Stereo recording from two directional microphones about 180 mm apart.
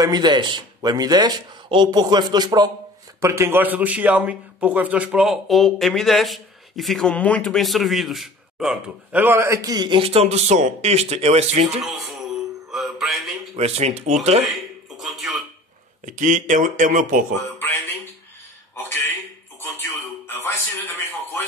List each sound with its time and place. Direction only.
0.0 s a man's voice: 25° right (ahead or behind)
12.7 s mantra: centre (ahead or behind)
13.6 s speech: 35° right (ahead or behind)
14.5 s music: centre (ahead or behind)
16.1 s speech: 45° right (ahead or behind)
17.6 s a sound: 15° left (ahead or behind)
20.2 s a sound: 10° left (ahead or behind)